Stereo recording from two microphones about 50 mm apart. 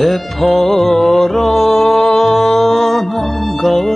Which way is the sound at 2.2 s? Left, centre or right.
Centre.